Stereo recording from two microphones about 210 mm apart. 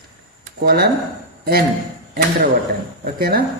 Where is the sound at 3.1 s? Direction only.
45° right (ahead or behind).